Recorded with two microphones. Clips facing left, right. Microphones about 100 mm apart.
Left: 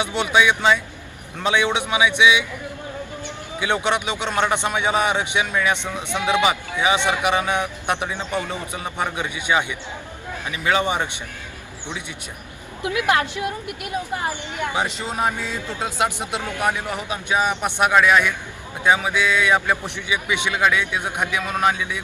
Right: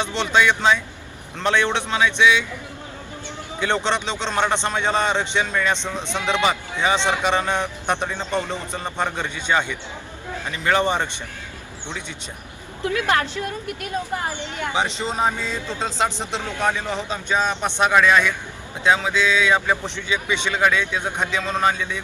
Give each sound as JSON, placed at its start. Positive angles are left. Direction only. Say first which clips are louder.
{"t": 0.0, "sound": "a man's voice", "louder": "left 1 dB", "side_deg": 10}
{"t": 3.6, "sound": "a man's voice", "louder": "even", "side_deg": 10}
{"t": 12.8, "sound": "a man's voice", "louder": "left 1 dB", "side_deg": 15}